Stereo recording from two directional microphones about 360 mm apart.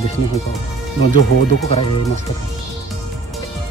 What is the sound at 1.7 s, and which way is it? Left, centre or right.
Speech, centre.